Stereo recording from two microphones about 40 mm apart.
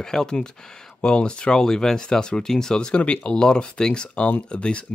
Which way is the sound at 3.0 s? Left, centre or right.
Left.